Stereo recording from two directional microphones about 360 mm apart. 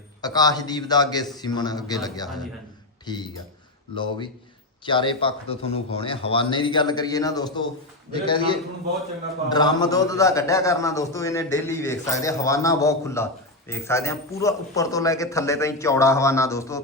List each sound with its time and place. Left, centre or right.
0.2 s a man's voice: centre
4.9 s a man's voice: centre